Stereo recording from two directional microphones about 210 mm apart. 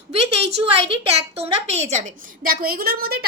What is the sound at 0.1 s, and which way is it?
A woman's voice, 30° right (ahead or behind).